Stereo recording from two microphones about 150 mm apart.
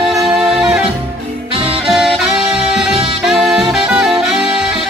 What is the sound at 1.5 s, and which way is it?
Music, 40° right (ahead or behind).